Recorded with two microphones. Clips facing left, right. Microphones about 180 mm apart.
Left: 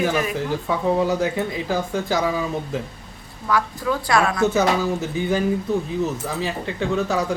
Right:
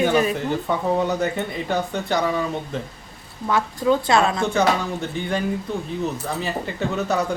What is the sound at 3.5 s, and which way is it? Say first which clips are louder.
Speech: right 3 dB; 25° right (ahead or behind).